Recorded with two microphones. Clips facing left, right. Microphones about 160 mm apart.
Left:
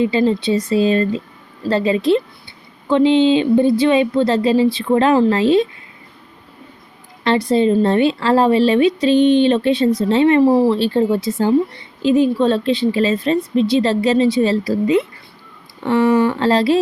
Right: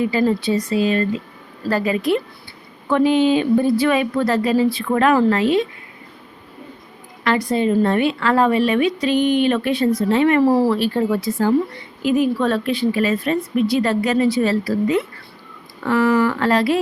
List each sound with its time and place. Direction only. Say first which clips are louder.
0.0 s a woman's voice: left 2 dB; 25° left (ahead or behind)
7.3 s a woman's voice: left 4 dB; 30° left (ahead or behind)